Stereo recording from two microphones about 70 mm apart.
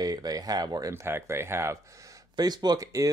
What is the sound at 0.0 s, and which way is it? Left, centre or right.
Speech, right.